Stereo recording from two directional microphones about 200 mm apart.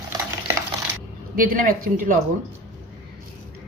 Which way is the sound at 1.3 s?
45° right (ahead or behind).